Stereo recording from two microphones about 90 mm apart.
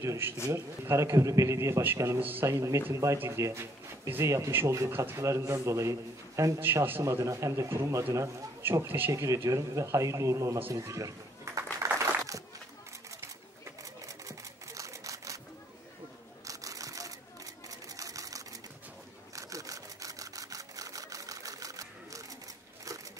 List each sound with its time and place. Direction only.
0.0 s a man's voice: 35° right (ahead or behind)
2.4 s a man's voice: 35° right (ahead or behind)
10.7 s a sound: 35° right (ahead or behind)
16.4 s camera: 40° right (ahead or behind)
17.6 s sewing machine: 40° right (ahead or behind)
19.3 s camera: 40° right (ahead or behind)